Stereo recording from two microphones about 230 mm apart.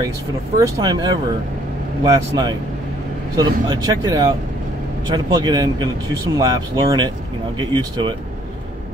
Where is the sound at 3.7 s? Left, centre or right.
Centre.